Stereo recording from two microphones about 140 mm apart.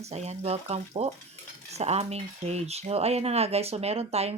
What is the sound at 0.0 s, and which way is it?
Speech, 50° right (ahead or behind).